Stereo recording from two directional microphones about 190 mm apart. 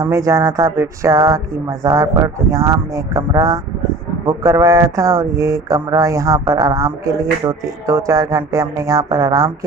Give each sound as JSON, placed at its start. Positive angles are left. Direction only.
{"t": 0.0, "sound": "speech", "side_deg": -15}